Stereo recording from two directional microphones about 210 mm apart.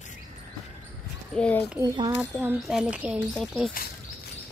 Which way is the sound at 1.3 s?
5° left (ahead or behind).